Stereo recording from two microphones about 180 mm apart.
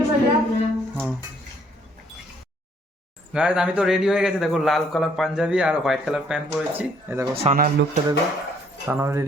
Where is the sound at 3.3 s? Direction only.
5° right (ahead or behind).